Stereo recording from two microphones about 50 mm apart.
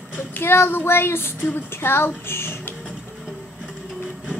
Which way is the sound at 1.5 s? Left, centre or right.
Left.